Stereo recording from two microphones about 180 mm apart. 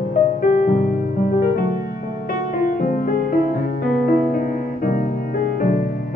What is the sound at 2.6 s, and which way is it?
Music, 50° left (ahead or behind).